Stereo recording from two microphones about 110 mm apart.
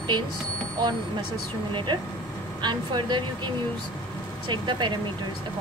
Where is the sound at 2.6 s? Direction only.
45° right (ahead or behind).